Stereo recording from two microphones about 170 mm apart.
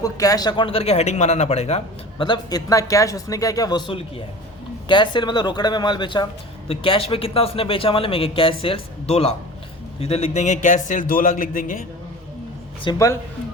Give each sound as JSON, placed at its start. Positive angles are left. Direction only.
{"t": 0.0, "sound": "a man's voice", "side_deg": 20}
{"t": 2.2, "sound": "a man's voice", "side_deg": 25}
{"t": 12.8, "sound": "speech", "side_deg": 20}